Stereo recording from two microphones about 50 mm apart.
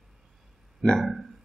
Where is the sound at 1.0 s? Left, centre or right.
Centre.